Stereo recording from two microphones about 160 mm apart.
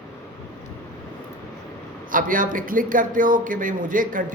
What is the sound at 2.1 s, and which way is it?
A man's voice, 60° right (ahead or behind).